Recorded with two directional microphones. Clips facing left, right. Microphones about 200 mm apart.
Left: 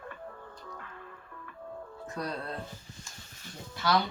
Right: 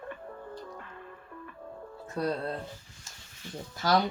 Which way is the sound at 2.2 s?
30° right (ahead or behind).